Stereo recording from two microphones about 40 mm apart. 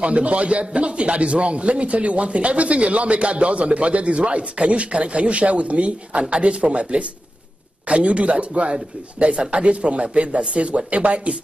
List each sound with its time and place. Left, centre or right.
0.0 s speech: right